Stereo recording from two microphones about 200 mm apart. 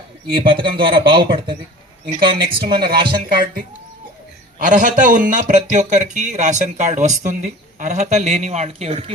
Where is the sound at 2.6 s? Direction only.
50° right (ahead or behind).